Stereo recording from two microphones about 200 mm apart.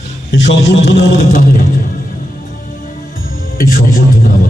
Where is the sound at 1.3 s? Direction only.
40° left (ahead or behind).